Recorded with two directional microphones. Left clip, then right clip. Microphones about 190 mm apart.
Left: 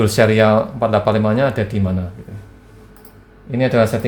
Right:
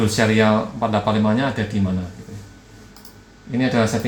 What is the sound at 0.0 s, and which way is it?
Speech, 65° left (ahead or behind).